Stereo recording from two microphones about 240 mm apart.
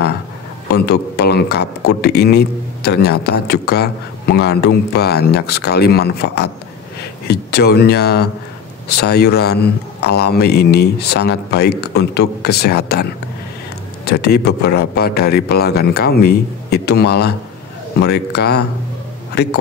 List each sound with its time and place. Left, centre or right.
0.7 s a man's voice: left
14.0 s a man's voice: left